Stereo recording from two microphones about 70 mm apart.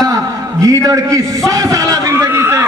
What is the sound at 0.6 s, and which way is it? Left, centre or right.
A man's voice, right.